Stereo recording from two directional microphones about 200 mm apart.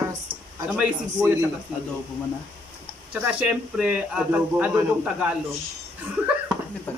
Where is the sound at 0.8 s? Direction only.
10° right (ahead or behind).